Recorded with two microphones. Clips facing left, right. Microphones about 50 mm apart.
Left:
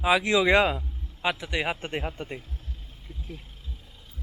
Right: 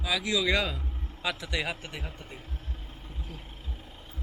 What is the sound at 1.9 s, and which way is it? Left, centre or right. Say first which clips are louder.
Speech: left 9 dB; left.